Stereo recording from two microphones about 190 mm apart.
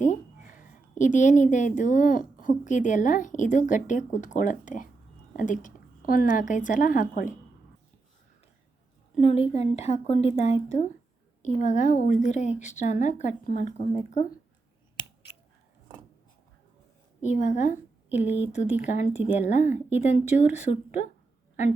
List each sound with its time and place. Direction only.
0.0 s a woman's voice: 45° left (ahead or behind)
9.2 s a woman's voice: 35° left (ahead or behind)
17.2 s a woman's voice: 40° left (ahead or behind)